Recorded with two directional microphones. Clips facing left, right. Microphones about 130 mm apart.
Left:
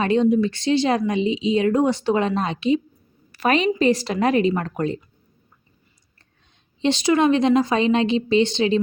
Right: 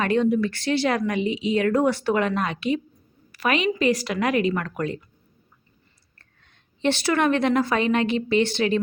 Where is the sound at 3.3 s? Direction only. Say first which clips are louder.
Left 4 dB; 35° left (ahead or behind).